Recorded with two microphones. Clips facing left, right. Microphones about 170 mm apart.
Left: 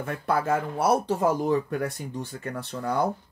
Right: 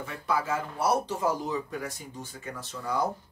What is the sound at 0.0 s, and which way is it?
Speech, 55° left (ahead or behind).